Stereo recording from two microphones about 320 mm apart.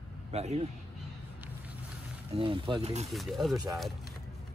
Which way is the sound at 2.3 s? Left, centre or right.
Centre.